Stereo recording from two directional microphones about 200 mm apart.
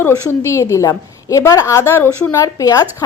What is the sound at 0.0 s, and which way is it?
A woman's voice, 15° left (ahead or behind).